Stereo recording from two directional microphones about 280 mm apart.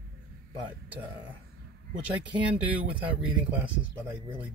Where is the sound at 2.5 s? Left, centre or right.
Centre.